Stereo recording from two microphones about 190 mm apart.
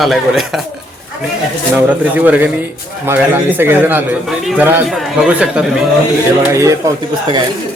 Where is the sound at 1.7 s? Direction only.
10° right (ahead or behind).